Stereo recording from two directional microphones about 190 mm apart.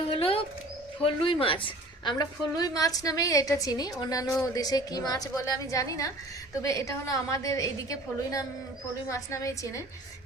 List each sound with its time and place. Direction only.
0.1 s bird: 30° left (ahead or behind)
1.0 s a woman's voice: 30° left (ahead or behind)